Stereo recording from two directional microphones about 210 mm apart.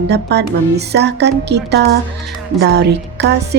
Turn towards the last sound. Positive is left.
turn(degrees=-55)  # may be behind; listen again after turning